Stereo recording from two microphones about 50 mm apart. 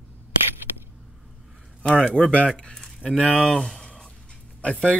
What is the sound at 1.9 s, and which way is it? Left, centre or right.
Speech, centre.